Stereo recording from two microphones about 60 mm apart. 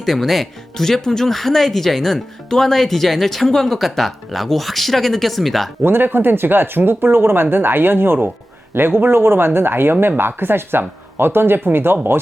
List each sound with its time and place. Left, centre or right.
0.0 s speech: centre
5.8 s speech: right